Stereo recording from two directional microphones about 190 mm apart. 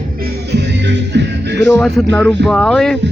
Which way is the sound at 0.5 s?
65° right (ahead or behind).